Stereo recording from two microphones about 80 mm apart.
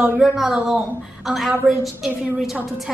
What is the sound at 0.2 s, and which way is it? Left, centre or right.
A woman's voice, centre.